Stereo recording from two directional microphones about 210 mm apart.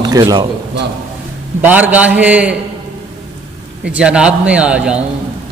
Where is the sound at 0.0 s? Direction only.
20° right (ahead or behind).